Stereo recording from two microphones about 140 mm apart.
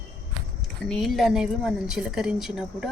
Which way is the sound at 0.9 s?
Centre (ahead or behind).